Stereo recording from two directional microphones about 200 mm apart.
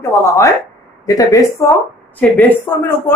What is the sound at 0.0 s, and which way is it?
Speech, 15° left (ahead or behind).